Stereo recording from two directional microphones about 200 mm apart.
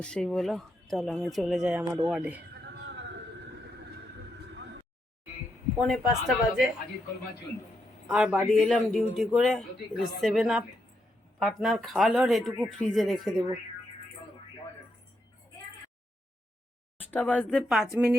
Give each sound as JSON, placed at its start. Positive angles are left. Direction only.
{"t": 0.0, "sound": "speech", "side_deg": 5}
{"t": 1.8, "sound": "speech", "side_deg": -15}
{"t": 2.6, "sound": "a sound", "side_deg": -60}
{"t": 5.7, "sound": "speech", "side_deg": 0}
{"t": 8.0, "sound": "speech", "side_deg": 0}
{"t": 17.0, "sound": "speech", "side_deg": 10}